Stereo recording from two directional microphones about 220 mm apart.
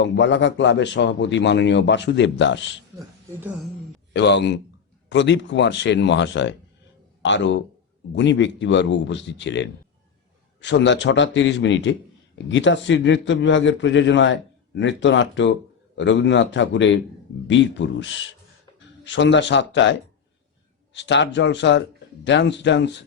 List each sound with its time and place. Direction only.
0.0 s a man's voice: 55° left (ahead or behind)
4.1 s a man's voice: 50° left (ahead or behind)